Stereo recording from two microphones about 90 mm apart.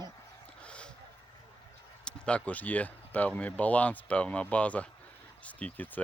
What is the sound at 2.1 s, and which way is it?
Speech, 10° left (ahead or behind).